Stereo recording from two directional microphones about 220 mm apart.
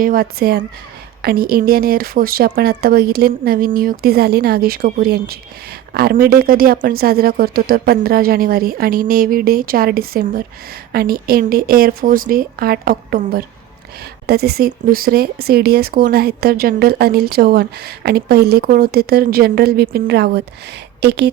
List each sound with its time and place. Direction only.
0.0 s a woman's voice: 40° right (ahead or behind)